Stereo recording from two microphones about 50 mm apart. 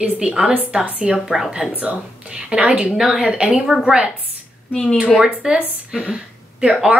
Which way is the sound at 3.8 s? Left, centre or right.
Centre.